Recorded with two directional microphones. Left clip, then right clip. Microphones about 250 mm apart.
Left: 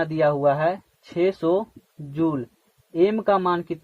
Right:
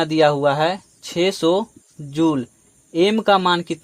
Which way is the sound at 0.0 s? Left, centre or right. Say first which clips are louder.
Right 4 dB; right.